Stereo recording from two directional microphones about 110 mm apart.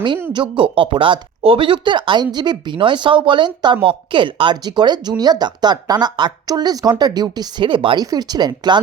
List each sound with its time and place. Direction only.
0.3 s speech: 50° right (ahead or behind)
8.1 s speech: 40° right (ahead or behind)